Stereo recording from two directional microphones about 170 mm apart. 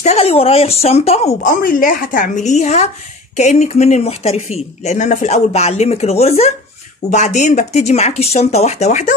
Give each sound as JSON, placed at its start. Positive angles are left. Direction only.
{"t": 0.0, "sound": "speech", "side_deg": 40}
{"t": 1.5, "sound": "speech", "side_deg": 55}